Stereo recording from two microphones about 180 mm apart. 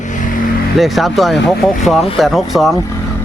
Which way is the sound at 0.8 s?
Centre (ahead or behind).